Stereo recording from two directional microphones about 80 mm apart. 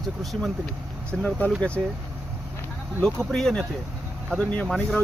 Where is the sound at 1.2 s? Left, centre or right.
Centre.